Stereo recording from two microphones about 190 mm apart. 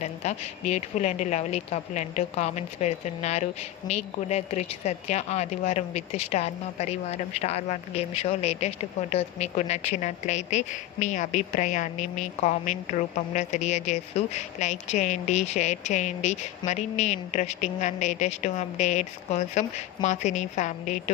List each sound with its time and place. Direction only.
0.0 s a woman's voice: 35° left (ahead or behind)